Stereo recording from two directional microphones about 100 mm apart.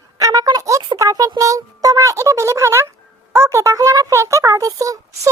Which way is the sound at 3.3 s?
30° right (ahead or behind).